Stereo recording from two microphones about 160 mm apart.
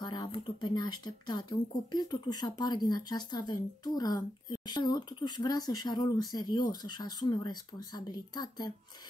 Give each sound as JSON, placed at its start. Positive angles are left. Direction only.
{"t": 0.0, "sound": "speech", "side_deg": 25}